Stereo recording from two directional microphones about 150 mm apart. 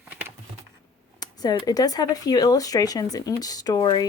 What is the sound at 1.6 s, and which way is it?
Speech, 25° left (ahead or behind).